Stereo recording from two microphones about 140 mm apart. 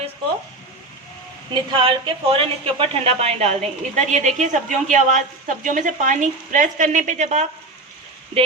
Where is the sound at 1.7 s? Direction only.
40° right (ahead or behind).